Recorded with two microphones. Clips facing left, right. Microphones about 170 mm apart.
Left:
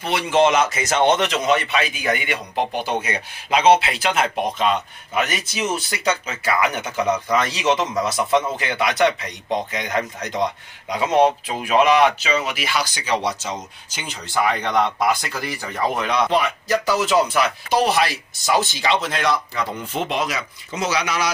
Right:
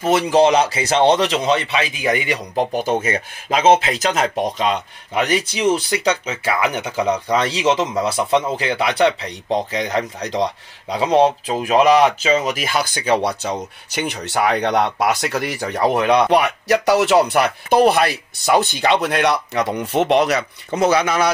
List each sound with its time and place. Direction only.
0.0 s speech: 40° right (ahead or behind)